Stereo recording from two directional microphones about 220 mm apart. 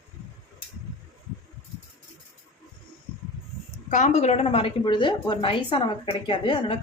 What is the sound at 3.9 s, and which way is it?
A woman's voice, 30° left (ahead or behind).